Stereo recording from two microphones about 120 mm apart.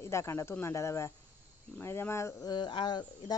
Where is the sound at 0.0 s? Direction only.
25° left (ahead or behind).